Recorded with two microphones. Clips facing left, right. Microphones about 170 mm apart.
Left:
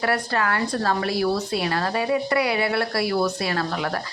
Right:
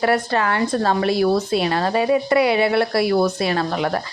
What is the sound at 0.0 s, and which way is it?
Speech, 25° right (ahead or behind).